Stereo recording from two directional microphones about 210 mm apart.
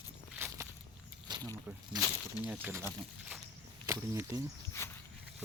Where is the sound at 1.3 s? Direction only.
20° right (ahead or behind).